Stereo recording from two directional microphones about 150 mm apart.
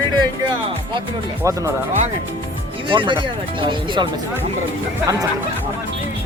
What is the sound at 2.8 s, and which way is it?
Speech, 35° right (ahead or behind).